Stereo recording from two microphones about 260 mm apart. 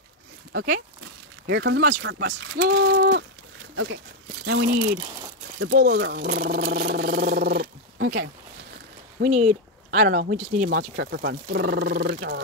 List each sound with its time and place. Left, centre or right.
0.5 s speech: right
4.5 s speech: right
9.2 s speech: right